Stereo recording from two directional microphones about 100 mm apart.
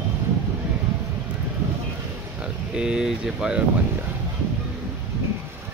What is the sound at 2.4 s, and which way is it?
Speech, 10° right (ahead or behind).